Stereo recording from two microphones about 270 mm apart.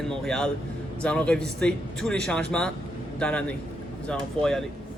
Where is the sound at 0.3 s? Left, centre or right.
Centre.